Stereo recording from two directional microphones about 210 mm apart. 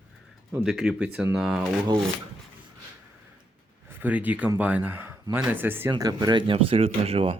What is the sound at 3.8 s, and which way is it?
Speech, 10° right (ahead or behind).